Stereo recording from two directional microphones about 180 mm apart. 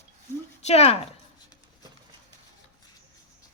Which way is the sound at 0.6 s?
35° left (ahead or behind).